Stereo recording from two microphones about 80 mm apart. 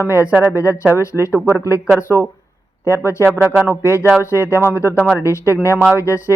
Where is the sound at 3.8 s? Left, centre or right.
Left.